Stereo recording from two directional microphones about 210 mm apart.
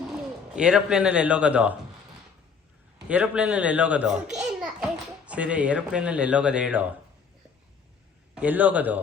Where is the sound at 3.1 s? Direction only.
5° right (ahead or behind).